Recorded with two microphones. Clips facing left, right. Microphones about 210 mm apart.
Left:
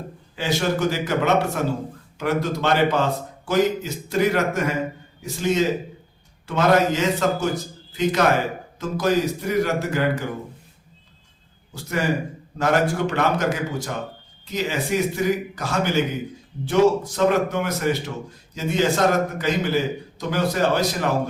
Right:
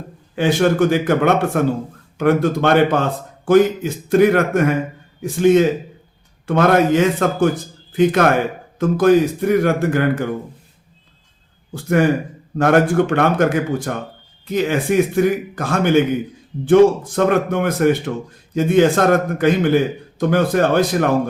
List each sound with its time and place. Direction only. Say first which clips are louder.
0.3 s a man's voice: right 8 dB; 55° right (ahead or behind)
11.7 s a man's voice: right 8 dB; 55° right (ahead or behind)